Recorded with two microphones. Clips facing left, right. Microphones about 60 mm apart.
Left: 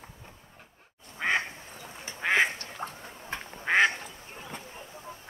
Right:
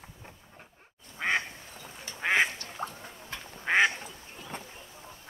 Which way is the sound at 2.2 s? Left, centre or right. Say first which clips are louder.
Left 1 dB; centre.